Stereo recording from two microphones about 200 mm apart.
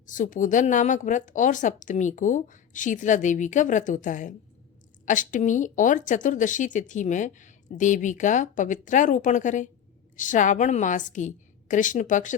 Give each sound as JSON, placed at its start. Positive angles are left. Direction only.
{"t": 0.0, "sound": "speech", "side_deg": 40}